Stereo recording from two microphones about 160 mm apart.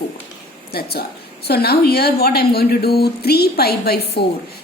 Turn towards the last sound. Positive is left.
turn(degrees=80)